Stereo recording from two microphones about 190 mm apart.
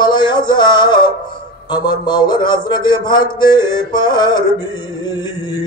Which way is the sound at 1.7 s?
20° left (ahead or behind).